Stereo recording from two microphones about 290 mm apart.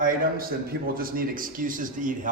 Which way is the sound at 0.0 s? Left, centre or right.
Right.